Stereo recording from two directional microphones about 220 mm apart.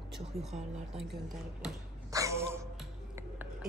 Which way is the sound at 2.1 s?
15° right (ahead or behind).